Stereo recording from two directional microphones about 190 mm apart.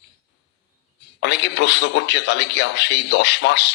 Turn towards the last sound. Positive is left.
turn(degrees=65)  # may be behind; listen again after turning